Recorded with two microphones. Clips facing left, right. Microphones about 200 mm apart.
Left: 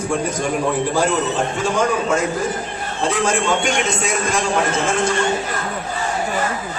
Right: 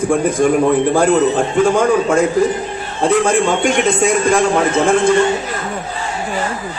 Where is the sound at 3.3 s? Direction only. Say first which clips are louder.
Right 5 dB; 55° right (ahead or behind).